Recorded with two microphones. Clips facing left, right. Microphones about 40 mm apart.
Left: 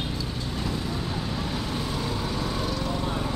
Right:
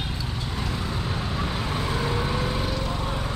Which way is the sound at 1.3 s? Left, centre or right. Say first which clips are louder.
Right 2 dB; right.